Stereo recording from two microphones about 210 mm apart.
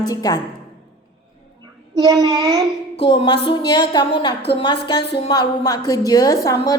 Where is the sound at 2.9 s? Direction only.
25° left (ahead or behind).